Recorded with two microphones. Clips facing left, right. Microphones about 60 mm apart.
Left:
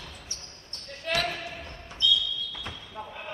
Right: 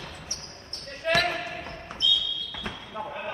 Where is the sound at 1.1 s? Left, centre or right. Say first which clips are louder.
Right 5 dB; right.